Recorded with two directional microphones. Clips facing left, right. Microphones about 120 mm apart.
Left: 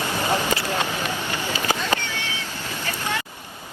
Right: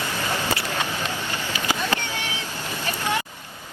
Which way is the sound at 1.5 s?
15° right (ahead or behind).